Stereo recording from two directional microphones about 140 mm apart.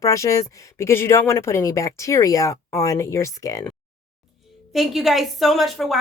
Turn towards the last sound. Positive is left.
turn(degrees=0)  # may be behind; listen again after turning